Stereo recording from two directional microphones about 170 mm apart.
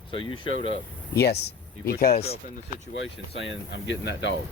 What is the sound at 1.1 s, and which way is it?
Speech, 75° left (ahead or behind).